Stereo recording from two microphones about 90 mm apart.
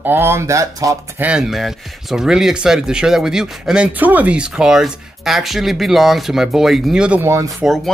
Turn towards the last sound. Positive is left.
turn(degrees=-35)  # may be behind; listen again after turning